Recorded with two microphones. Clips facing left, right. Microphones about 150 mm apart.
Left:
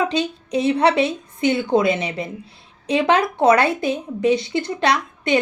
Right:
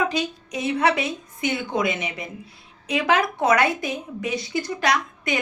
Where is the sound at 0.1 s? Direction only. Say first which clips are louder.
Left 5 dB; 30° left (ahead or behind).